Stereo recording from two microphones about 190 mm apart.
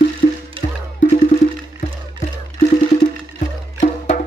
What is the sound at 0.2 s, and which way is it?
Music, 45° left (ahead or behind).